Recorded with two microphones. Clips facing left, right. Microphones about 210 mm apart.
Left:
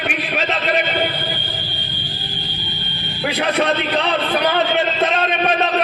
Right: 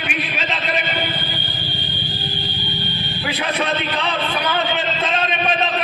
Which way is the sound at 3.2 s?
60° left (ahead or behind).